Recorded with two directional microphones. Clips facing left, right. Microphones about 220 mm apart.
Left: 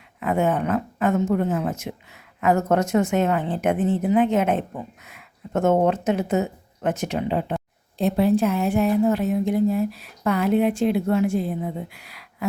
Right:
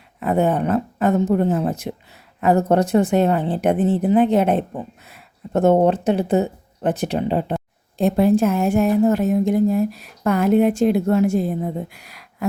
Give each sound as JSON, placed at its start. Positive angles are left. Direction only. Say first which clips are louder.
{"t": 0.2, "sound": "a woman's voice", "louder": "right 3 dB", "side_deg": -35}
{"t": 7.9, "sound": "a woman's voice", "louder": "right 3 dB", "side_deg": -50}